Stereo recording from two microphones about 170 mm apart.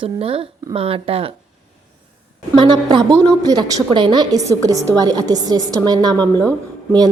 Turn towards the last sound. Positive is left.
turn(degrees=5)  # may be behind; listen again after turning